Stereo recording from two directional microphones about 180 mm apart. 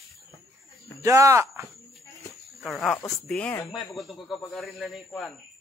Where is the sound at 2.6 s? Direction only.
Centre (ahead or behind).